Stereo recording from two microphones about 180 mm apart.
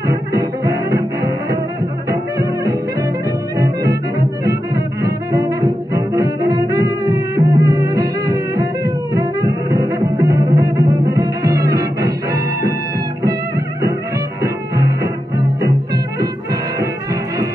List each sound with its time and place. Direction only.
0.0 s music: 20° right (ahead or behind)
5.0 s bowed string instrument: 20° right (ahead or behind)
14.4 s music: 20° right (ahead or behind)